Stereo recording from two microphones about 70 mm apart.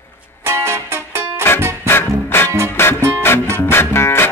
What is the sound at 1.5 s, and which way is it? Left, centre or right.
Music, left.